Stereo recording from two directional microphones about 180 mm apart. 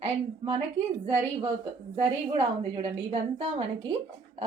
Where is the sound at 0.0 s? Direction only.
30° right (ahead or behind).